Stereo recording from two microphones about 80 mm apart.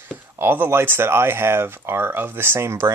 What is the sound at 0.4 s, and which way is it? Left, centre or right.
Speech, right.